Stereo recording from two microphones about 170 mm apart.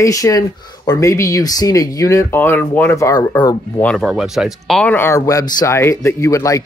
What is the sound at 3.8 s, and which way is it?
Speech, centre (ahead or behind).